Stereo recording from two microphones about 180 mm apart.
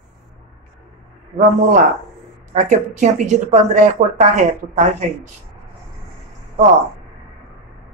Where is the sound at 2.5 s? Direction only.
40° right (ahead or behind).